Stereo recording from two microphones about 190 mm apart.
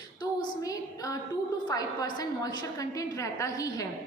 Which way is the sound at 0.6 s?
15° left (ahead or behind).